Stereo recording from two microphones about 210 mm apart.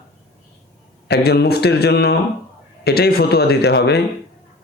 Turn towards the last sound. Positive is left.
turn(degrees=50)  # may be behind; listen again after turning